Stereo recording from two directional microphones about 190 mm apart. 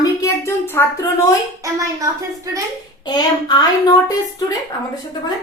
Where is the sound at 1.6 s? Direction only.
15° right (ahead or behind).